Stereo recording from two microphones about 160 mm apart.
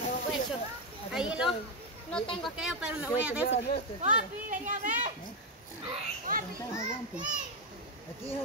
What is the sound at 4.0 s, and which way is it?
Speech, 55° right (ahead or behind).